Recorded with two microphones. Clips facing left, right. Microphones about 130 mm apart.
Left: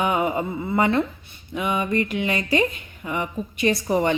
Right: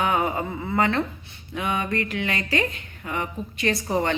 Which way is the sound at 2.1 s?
20° left (ahead or behind).